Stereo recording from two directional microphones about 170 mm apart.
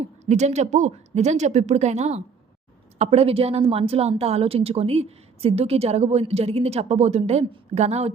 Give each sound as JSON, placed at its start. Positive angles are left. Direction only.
{"t": 0.0, "sound": "a woman's voice", "side_deg": -40}